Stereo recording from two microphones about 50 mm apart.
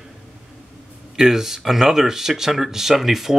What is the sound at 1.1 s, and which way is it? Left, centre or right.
Speech, centre.